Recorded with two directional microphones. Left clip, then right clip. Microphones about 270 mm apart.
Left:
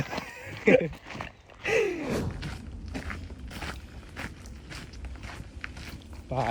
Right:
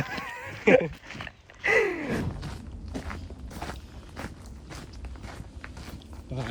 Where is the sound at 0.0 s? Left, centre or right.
Centre.